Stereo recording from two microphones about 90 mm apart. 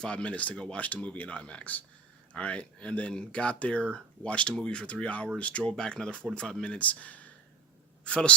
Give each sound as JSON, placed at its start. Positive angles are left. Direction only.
{"t": 0.0, "sound": "speech", "side_deg": 10}